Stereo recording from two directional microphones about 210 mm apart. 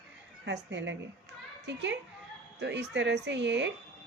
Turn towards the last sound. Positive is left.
turn(degrees=-55)  # may be behind; listen again after turning